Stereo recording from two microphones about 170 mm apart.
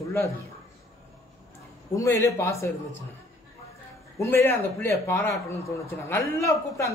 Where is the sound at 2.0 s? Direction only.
20° left (ahead or behind).